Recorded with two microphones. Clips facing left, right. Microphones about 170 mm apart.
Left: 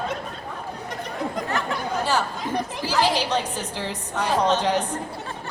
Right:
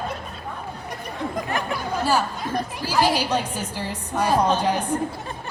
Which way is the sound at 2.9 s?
10° right (ahead or behind).